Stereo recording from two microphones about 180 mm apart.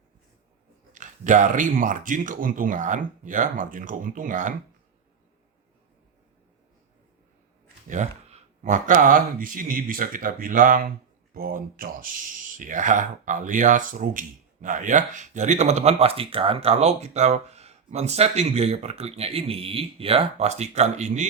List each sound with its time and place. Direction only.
0.9 s speech: 45° right (ahead or behind)
7.9 s speech: 40° right (ahead or behind)